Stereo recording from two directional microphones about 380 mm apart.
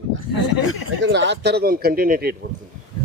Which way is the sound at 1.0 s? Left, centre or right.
Right.